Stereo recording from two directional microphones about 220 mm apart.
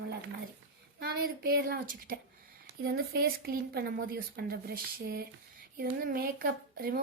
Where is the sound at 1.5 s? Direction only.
40° right (ahead or behind).